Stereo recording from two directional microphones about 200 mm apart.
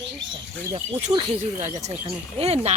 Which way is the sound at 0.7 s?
30° right (ahead or behind).